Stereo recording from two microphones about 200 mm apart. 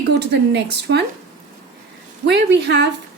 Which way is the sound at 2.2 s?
60° right (ahead or behind).